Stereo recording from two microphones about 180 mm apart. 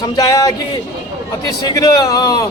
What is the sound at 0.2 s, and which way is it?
Speech, 20° left (ahead or behind).